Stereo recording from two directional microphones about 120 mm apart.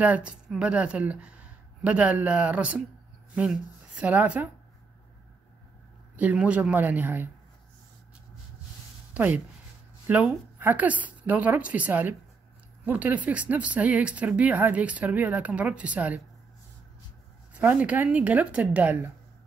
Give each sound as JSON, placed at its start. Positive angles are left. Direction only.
{"t": 0.0, "sound": "speech", "side_deg": -10}
{"t": 6.1, "sound": "speech", "side_deg": -10}
{"t": 9.1, "sound": "speech", "side_deg": -15}
{"t": 17.6, "sound": "speech", "side_deg": -10}